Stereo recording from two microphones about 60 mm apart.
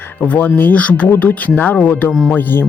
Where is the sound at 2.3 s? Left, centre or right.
Left.